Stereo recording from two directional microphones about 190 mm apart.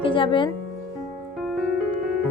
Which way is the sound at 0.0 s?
25° left (ahead or behind).